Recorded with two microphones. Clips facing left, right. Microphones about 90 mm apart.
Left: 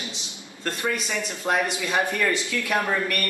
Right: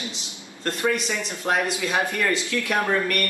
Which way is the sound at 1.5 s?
Centre (ahead or behind).